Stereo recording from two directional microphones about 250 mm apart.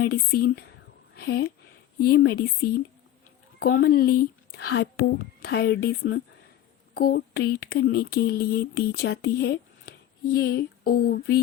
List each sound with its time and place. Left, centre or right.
0.0 s speech: left